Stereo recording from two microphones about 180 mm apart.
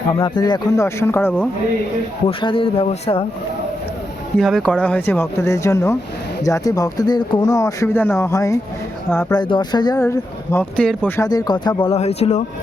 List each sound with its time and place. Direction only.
0.1 s speech: 25° left (ahead or behind)
2.2 s speech: 30° left (ahead or behind)
4.4 s speech: 5° left (ahead or behind)
9.4 s speech: 25° left (ahead or behind); by 11.1 s 5° left (ahead or behind)
11.2 s speech: 20° left (ahead or behind)
11.9 s speech: 35° left (ahead or behind)